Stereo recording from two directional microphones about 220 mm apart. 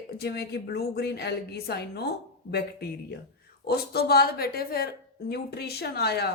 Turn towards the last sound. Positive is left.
turn(degrees=45)  # may be behind; listen again after turning